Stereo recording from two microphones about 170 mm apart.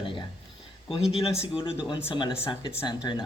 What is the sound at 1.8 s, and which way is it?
Speech, 25° left (ahead or behind).